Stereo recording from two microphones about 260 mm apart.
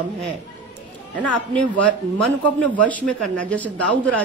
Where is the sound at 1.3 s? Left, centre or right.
Right.